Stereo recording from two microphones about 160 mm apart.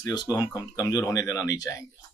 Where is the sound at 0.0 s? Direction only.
25° left (ahead or behind).